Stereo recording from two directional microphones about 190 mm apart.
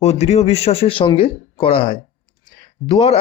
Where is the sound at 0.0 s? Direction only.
35° left (ahead or behind).